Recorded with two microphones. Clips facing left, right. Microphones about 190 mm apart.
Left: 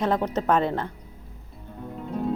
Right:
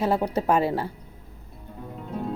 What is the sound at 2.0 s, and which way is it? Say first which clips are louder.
Music: left 4 dB; centre (ahead or behind).